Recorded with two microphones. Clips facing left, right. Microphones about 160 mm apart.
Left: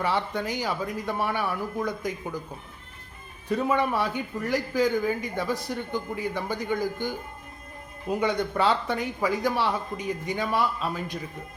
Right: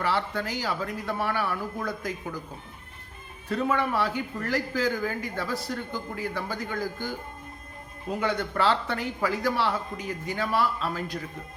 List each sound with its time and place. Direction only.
0.0 s a man's voice: 15° left (ahead or behind)
3.5 s a man's voice: 15° left (ahead or behind)
8.2 s a man's voice: 15° left (ahead or behind)